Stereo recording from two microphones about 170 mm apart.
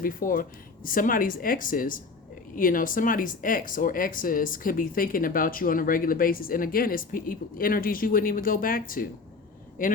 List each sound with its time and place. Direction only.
0.0 s speech: 55° left (ahead or behind)